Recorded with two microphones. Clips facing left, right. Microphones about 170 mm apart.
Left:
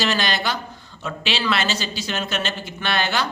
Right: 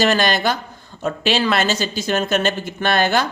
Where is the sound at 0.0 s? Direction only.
50° right (ahead or behind).